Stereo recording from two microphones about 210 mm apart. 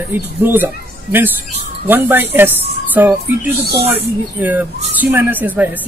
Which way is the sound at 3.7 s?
30° right (ahead or behind).